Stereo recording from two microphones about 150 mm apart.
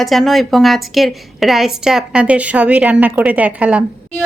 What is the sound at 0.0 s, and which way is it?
A woman's voice, centre (ahead or behind).